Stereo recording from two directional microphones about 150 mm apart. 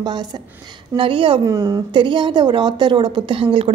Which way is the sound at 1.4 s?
20° right (ahead or behind).